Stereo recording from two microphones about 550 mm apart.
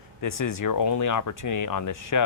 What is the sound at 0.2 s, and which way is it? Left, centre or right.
Speech, left.